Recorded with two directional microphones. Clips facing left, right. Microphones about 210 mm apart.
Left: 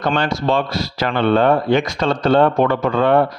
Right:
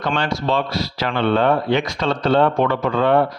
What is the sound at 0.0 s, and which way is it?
Speech, 45° left (ahead or behind).